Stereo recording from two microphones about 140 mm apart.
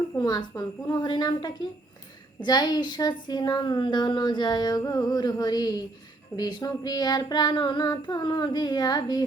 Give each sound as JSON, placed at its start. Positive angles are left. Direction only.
{"t": 0.2, "sound": "speech", "side_deg": 30}